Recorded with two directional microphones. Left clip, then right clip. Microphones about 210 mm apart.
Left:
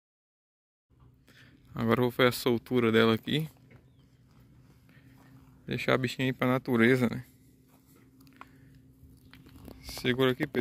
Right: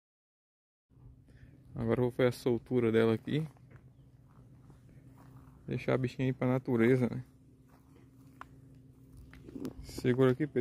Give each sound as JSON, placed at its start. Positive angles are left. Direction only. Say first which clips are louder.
{"t": 1.3, "sound": "speech", "louder": "left 6 dB", "side_deg": 5}
{"t": 5.7, "sound": "speech", "louder": "left 5 dB", "side_deg": 0}
{"t": 9.8, "sound": "speech", "louder": "left 1 dB", "side_deg": -20}